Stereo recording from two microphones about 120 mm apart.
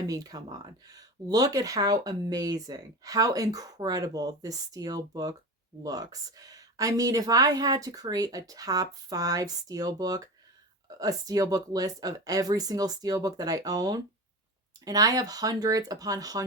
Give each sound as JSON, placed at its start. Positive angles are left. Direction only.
{"t": 0.1, "sound": "speech", "side_deg": -30}